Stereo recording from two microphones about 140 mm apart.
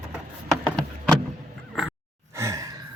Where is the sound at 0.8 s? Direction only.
5° left (ahead or behind).